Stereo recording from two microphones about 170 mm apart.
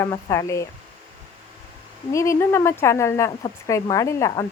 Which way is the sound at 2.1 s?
15° left (ahead or behind).